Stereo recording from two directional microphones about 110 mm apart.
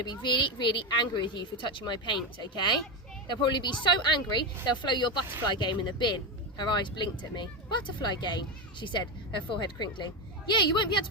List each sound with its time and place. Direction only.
0.0 s a woman's voice: 45° left (ahead or behind)